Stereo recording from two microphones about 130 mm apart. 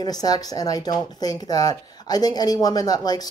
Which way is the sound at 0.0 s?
30° left (ahead or behind).